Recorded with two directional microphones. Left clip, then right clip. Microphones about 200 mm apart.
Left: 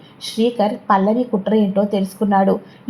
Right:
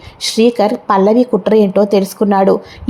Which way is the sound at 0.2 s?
30° right (ahead or behind).